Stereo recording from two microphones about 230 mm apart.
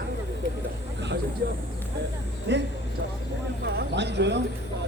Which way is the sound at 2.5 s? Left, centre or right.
Right.